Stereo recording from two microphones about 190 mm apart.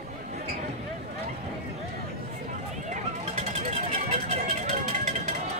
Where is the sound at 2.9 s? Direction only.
40° right (ahead or behind).